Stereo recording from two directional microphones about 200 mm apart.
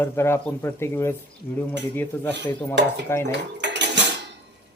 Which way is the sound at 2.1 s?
10° left (ahead or behind).